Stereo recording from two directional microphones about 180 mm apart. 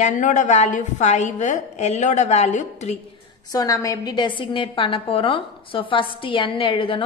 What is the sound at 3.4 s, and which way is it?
A woman's voice, 20° left (ahead or behind).